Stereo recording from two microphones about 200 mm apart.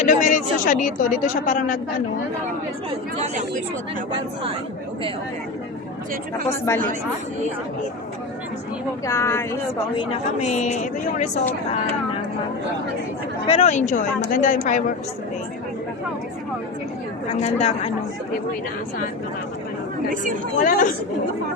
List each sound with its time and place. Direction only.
0.0 s a woman's voice: 40° left (ahead or behind)
9.0 s speech: 15° left (ahead or behind)
10.0 s a woman's voice: 35° left (ahead or behind)
13.5 s a woman's voice: 35° left (ahead or behind)
17.4 s a woman's voice: 30° left (ahead or behind)
20.6 s speech: 45° left (ahead or behind)